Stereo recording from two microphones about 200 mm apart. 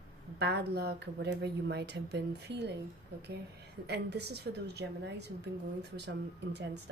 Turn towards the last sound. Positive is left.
turn(degrees=-60)  # may be behind; listen again after turning